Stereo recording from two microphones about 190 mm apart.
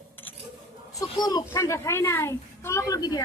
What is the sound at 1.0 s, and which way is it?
Speech, 20° left (ahead or behind).